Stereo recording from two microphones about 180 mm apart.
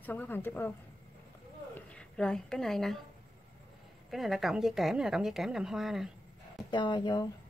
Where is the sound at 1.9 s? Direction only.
5° left (ahead or behind).